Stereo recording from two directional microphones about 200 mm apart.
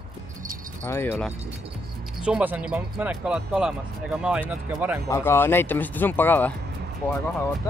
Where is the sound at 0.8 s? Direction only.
10° left (ahead or behind).